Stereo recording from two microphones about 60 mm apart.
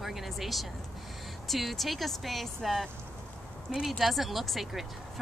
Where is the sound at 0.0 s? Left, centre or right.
Centre.